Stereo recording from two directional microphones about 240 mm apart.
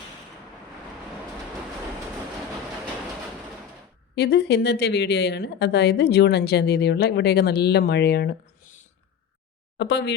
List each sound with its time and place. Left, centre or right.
4.1 s speech: left
9.7 s speech: left